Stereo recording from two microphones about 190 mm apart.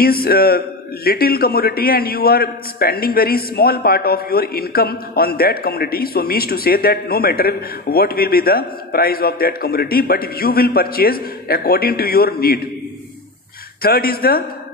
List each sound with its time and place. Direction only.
0.0 s a man's voice: 55° left (ahead or behind)
13.8 s a man's voice: 55° left (ahead or behind)